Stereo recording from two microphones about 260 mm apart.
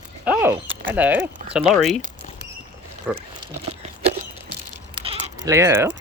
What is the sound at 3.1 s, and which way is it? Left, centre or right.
Speech, centre.